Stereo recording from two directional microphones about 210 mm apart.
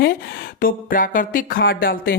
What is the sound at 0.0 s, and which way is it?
A woman's voice, 45° left (ahead or behind).